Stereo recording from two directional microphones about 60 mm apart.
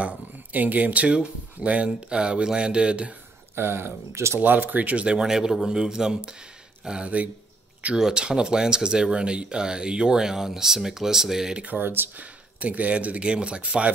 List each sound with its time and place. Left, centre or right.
0.0 s speech: right
3.5 s speech: right
4.4 s speech: right
5.0 s speech: centre
11.6 s speech: right
12.2 s speech: right